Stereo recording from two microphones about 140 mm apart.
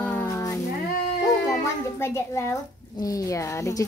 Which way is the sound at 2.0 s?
20° left (ahead or behind).